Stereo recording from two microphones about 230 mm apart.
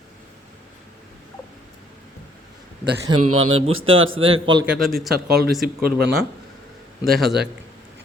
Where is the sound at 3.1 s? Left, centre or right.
Right.